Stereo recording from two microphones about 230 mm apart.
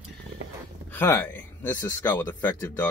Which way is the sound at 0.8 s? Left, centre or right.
Centre.